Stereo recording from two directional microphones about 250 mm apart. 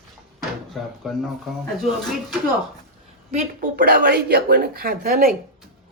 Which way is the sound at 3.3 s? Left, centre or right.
Right.